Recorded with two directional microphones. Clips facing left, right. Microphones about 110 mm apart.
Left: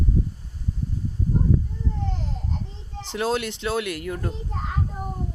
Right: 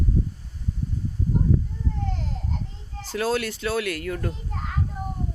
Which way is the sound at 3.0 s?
25° left (ahead or behind).